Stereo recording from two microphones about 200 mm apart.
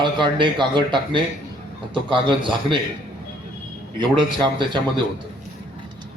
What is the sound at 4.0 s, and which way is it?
Speech, 25° right (ahead or behind).